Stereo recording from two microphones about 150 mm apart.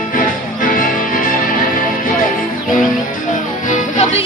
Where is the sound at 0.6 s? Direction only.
65° left (ahead or behind).